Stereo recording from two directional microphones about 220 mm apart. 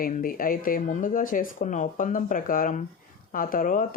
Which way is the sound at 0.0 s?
40° left (ahead or behind).